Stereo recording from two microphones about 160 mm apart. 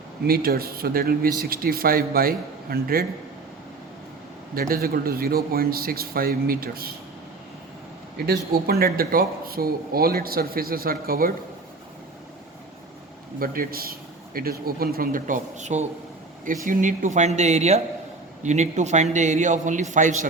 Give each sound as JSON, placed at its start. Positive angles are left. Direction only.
{"t": 0.3, "sound": "speech", "side_deg": -70}
{"t": 4.5, "sound": "speech", "side_deg": -65}
{"t": 8.3, "sound": "speech", "side_deg": -75}
{"t": 13.4, "sound": "a man's voice", "side_deg": -65}